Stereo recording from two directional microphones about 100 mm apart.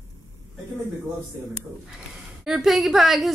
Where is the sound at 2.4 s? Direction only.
5° right (ahead or behind).